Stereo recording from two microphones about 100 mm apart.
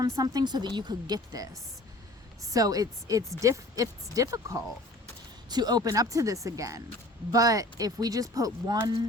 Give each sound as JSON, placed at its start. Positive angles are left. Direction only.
{"t": 0.0, "sound": "a woman's voice", "side_deg": -40}